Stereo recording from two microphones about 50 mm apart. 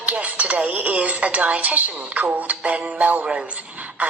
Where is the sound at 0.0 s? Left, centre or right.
Right.